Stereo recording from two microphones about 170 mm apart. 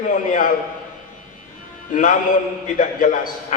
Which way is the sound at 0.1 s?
50° left (ahead or behind).